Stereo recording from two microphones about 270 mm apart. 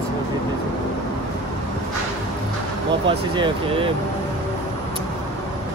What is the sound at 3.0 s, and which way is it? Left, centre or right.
Speech, centre.